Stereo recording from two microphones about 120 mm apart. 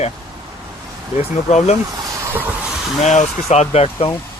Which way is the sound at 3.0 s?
80° left.